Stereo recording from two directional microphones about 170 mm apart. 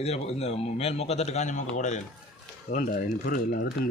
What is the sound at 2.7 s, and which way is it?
Speech, 55° left (ahead or behind).